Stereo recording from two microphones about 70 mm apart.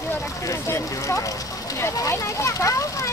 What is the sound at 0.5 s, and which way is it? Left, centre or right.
Speech, left.